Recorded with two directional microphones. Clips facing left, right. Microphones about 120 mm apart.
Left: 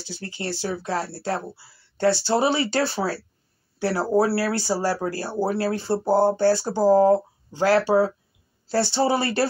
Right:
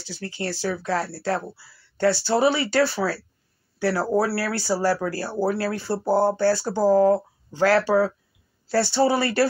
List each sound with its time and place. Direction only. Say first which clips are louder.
0.2 s speech: right 2 dB; 20° left (ahead or behind)